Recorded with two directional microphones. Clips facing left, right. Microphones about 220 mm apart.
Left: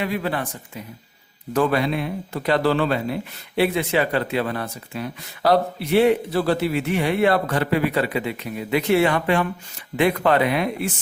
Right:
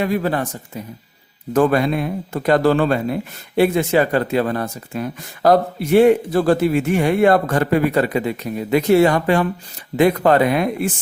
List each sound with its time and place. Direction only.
0.0 s speech: 45° right (ahead or behind)